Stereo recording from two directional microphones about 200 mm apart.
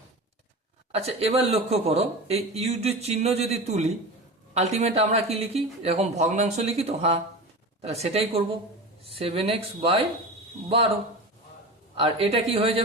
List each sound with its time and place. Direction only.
0.9 s speech: 30° right (ahead or behind)
11.9 s speech: 30° right (ahead or behind)